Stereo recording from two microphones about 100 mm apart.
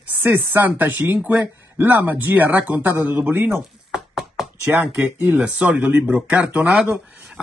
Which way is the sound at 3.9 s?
5° right (ahead or behind).